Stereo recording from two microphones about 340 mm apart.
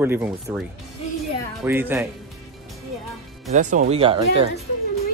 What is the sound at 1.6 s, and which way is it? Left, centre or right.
Speech, centre.